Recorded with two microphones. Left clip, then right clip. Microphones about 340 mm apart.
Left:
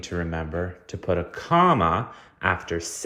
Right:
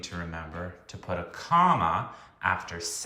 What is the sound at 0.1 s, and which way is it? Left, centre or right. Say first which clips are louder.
Speech: left 11 dB; left.